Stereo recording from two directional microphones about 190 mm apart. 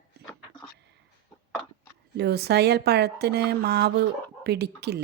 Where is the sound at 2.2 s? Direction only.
60° right (ahead or behind).